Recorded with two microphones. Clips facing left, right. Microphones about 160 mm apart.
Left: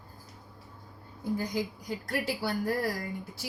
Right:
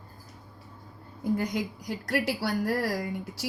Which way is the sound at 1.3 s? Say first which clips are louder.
Right 2 dB; 70° right (ahead or behind).